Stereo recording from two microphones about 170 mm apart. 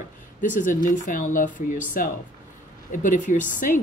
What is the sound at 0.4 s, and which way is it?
Speech, 50° left (ahead or behind).